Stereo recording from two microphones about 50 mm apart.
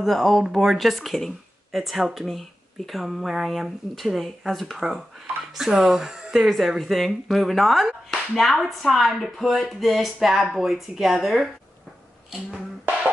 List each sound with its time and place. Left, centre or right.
0.0 s speech: centre
6.8 s speech: centre